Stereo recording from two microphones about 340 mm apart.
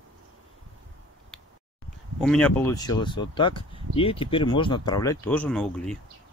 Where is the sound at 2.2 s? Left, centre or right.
Centre.